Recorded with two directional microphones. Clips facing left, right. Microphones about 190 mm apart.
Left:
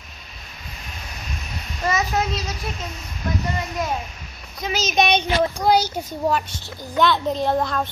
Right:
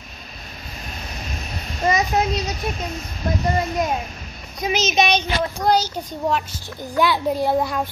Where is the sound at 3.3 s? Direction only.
35° right (ahead or behind).